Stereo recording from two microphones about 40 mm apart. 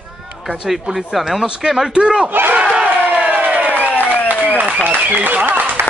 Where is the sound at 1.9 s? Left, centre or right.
Right.